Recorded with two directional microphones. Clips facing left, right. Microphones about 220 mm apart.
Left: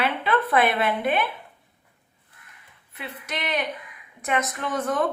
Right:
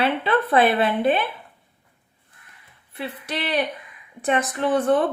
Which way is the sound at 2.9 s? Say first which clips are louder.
Right 5 dB; 30° right (ahead or behind).